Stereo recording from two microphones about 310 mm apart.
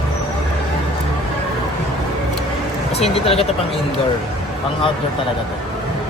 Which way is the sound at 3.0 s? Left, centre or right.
Centre.